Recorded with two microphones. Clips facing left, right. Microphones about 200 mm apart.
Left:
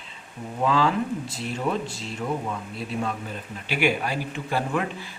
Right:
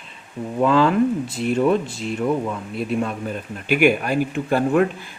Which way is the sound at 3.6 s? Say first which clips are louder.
Right 7 dB; 50° right (ahead or behind).